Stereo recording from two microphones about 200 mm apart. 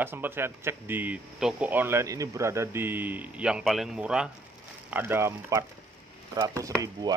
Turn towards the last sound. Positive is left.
turn(degrees=-20)  # may be behind; listen again after turning